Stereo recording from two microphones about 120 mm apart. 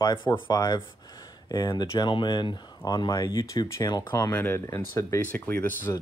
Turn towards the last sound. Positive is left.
turn(degrees=15)  # may be behind; listen again after turning